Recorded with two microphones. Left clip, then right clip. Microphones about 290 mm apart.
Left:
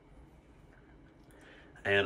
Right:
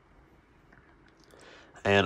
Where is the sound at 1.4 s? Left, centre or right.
Centre.